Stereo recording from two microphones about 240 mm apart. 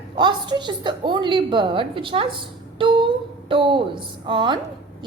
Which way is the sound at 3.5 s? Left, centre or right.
Right.